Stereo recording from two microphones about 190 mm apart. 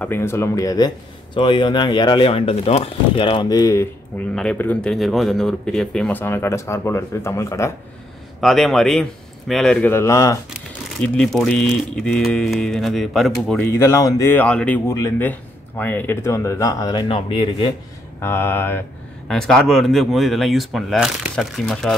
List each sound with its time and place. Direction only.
0.0 s speech: 10° left (ahead or behind)
8.4 s speech: centre (ahead or behind)
11.0 s speech: 5° left (ahead or behind)
13.7 s speech: 15° left (ahead or behind)
18.2 s speech: 10° left (ahead or behind)